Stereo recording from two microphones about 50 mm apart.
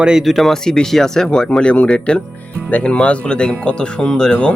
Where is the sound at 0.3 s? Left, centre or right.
Centre.